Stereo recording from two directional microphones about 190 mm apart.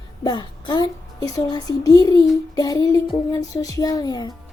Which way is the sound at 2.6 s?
20° left (ahead or behind).